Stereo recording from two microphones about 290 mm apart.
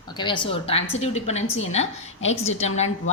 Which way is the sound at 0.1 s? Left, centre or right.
Centre.